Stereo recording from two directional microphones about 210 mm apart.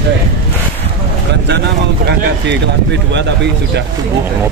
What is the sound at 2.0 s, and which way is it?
Speech, 55° right (ahead or behind).